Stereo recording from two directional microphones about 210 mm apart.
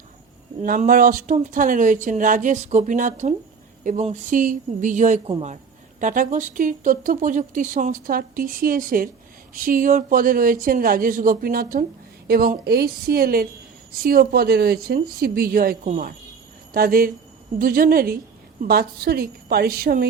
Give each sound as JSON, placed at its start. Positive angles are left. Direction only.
{"t": 0.6, "sound": "speech", "side_deg": -40}